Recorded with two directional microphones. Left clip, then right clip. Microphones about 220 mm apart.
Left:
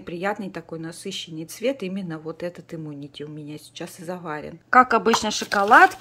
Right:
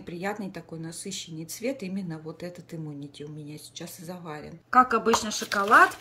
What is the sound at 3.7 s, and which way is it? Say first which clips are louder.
Speech: left 8 dB; 15° left (ahead or behind).